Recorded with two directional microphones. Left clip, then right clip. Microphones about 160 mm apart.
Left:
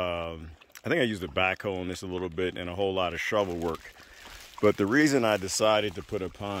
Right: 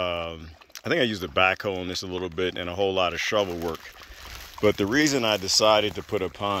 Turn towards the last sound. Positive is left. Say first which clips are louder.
# right 7 dB
turn(degrees=0)  # may be behind; listen again after turning